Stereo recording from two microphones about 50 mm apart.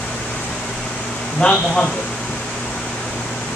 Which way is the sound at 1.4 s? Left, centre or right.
Centre.